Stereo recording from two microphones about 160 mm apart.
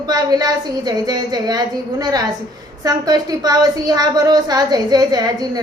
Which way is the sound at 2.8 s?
25° right (ahead or behind).